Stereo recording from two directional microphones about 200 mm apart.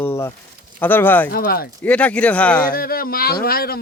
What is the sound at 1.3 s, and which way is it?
Speech, 50° left (ahead or behind).